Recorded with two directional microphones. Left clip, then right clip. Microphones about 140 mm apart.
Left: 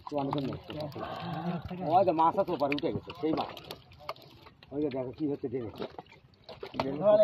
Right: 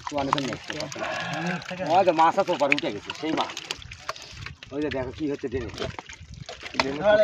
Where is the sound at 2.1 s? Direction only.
70° right (ahead or behind).